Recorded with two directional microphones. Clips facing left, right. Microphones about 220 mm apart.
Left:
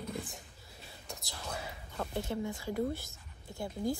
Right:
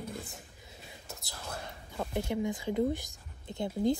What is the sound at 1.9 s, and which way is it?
Speech, 15° right (ahead or behind).